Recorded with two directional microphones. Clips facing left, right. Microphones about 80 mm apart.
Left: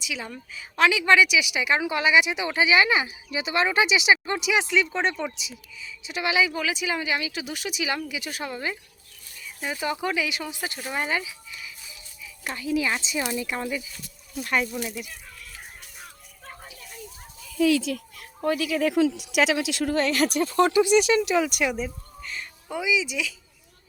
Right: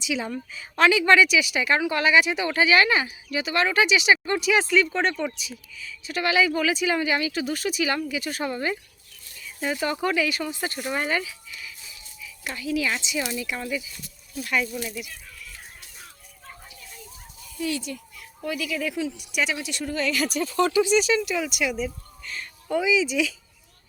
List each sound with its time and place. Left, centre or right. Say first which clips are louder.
0.0 s a woman's voice: right 6 dB; centre
12.2 s a woman's voice: even; left
13.4 s speech: left 1 dB; left
17.9 s speech: left 5 dB; left
18.4 s speech: left 5 dB; left
22.7 s speech: right 4 dB; centre